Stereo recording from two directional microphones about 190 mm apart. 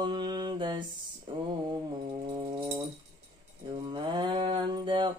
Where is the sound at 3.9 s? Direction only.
25° right (ahead or behind).